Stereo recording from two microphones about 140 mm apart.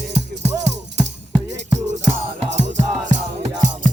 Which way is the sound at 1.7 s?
55° right (ahead or behind).